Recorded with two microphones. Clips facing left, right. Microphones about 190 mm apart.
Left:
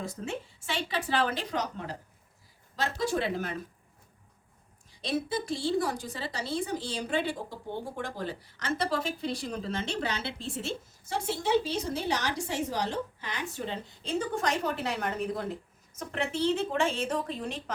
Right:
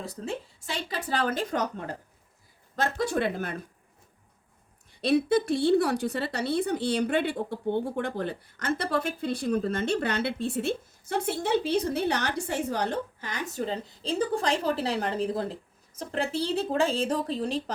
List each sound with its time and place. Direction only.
0.0 s a woman's voice: 35° right (ahead or behind); by 2.0 s 50° right (ahead or behind)
3.0 s a woman's voice: 55° right (ahead or behind)
4.9 s a woman's voice: 60° right (ahead or behind); by 17.6 s 35° right (ahead or behind)